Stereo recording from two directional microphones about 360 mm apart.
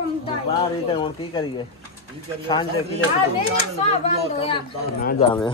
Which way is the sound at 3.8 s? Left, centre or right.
Centre.